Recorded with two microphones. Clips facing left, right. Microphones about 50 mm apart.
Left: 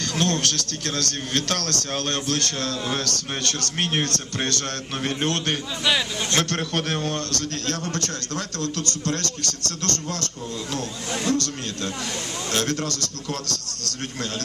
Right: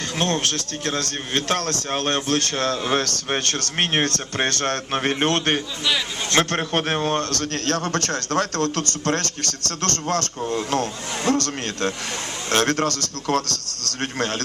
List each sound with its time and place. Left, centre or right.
0.2 s a man's voice: right